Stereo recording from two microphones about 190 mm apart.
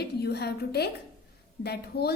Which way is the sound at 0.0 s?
60° left (ahead or behind).